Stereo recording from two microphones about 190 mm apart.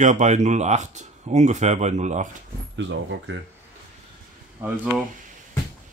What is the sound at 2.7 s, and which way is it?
Speech, 75° right (ahead or behind).